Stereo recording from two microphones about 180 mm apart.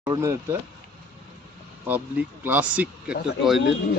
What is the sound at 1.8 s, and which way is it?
Speech, 10° right (ahead or behind).